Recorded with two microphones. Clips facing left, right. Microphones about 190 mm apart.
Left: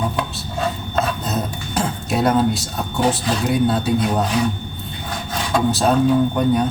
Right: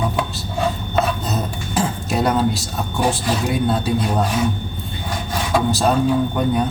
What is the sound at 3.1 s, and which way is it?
Speech, centre (ahead or behind).